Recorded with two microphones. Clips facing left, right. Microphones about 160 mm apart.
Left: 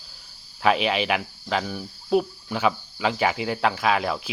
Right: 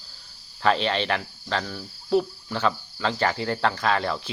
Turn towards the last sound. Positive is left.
turn(degrees=10)  # may be behind; listen again after turning